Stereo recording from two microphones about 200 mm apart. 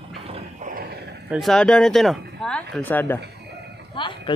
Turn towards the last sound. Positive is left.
turn(degrees=25)  # may be behind; listen again after turning